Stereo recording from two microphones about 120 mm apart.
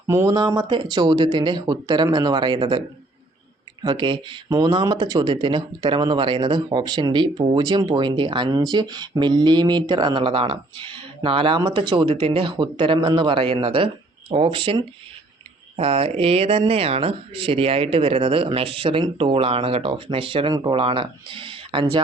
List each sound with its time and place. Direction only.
0.1 s speech: 30° right (ahead or behind)
3.8 s speech: 40° right (ahead or behind)
4.4 s speech: 30° right (ahead or behind)